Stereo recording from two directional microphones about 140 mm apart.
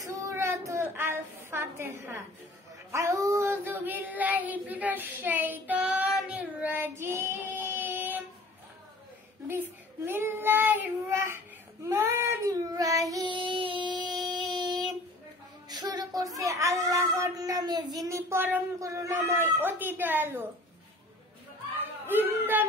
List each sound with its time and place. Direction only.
0.0 s a sound: 20° right (ahead or behind)
0.9 s child singing: 15° right (ahead or behind)
10.0 s child singing: 15° right (ahead or behind)
13.4 s a sound: 35° right (ahead or behind)
15.7 s speech: 30° right (ahead or behind); by 20.4 s 15° right (ahead or behind)
22.0 s child singing: 15° right (ahead or behind)